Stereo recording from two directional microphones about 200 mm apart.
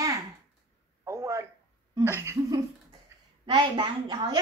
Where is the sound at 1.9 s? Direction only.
15° right (ahead or behind).